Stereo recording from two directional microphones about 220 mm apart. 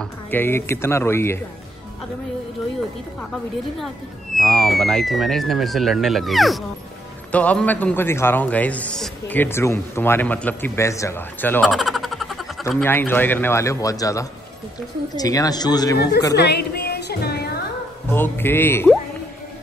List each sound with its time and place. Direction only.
0.0 s a man's voice: 10° left (ahead or behind)
4.4 s a man's voice: 5° left (ahead or behind)
16.3 s music: 50° left (ahead or behind)
18.1 s a man's voice: 10° left (ahead or behind)